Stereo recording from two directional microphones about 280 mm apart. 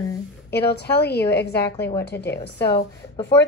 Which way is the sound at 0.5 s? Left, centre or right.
Left.